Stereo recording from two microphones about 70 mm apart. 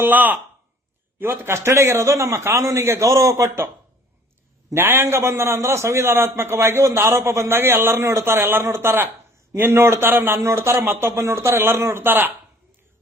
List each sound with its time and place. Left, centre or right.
0.0 s a man's voice: right
4.7 s a man's voice: right